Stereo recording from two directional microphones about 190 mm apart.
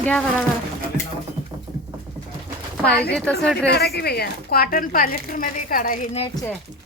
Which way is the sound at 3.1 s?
5° left (ahead or behind).